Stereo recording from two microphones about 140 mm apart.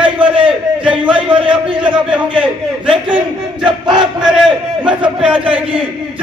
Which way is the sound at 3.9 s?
5° right (ahead or behind).